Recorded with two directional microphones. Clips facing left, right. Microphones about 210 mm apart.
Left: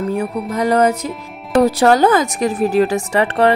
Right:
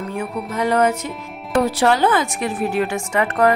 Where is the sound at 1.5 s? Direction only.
40° left (ahead or behind).